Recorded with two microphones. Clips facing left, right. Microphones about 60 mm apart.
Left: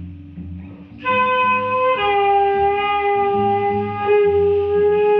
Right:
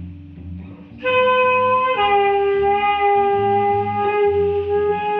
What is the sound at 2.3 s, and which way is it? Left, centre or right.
Shofar, left.